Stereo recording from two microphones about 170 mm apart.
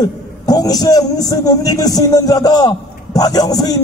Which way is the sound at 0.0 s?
20° left (ahead or behind).